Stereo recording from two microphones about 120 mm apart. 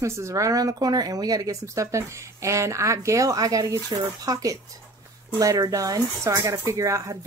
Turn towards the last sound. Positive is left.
turn(degrees=-25)  # may be behind; listen again after turning